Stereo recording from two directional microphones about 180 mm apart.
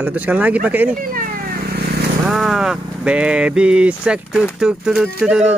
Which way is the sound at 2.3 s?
Centre (ahead or behind).